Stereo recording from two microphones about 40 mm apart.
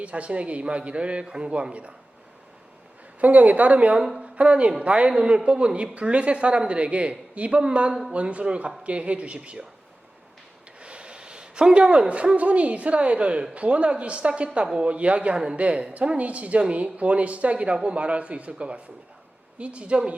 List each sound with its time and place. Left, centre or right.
0.0 s a woman's voice: right
3.2 s a woman's voice: right
10.8 s a woman's voice: right